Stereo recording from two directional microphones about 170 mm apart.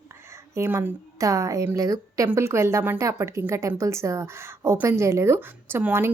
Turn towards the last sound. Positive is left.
turn(degrees=-15)  # may be behind; listen again after turning